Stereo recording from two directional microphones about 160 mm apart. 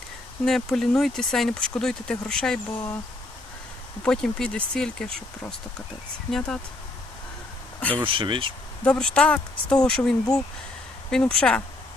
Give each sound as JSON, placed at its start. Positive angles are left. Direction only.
{"t": 0.4, "sound": "speech", "side_deg": 0}
{"t": 4.0, "sound": "speech", "side_deg": 5}
{"t": 7.8, "sound": "speech", "side_deg": 10}
{"t": 8.0, "sound": "speech", "side_deg": -30}
{"t": 8.8, "sound": "speech", "side_deg": 5}